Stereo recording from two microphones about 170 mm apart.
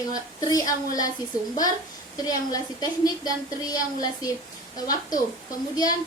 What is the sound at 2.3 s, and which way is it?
A woman's voice, 20° left (ahead or behind).